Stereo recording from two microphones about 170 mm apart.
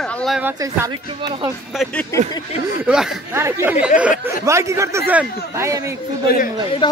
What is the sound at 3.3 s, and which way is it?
A man's voice, 15° right (ahead or behind).